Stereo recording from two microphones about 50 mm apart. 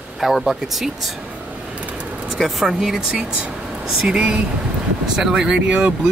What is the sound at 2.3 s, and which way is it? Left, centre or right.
Speech, centre.